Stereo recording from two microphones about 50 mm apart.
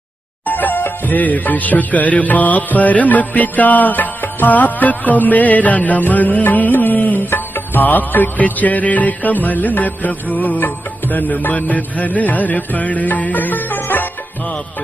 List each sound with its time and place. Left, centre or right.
0.5 s music: left